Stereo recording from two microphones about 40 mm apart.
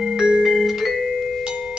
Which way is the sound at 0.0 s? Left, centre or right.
Centre.